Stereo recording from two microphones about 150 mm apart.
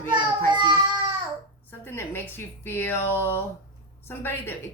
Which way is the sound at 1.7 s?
15° left (ahead or behind).